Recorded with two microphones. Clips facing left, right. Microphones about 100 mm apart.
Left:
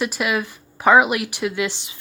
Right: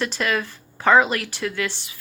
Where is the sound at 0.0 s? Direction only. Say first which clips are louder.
Left 1 dB; 10° left (ahead or behind).